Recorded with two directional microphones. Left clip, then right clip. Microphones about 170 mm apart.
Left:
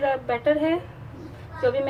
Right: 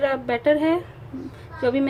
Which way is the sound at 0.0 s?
55° right (ahead or behind).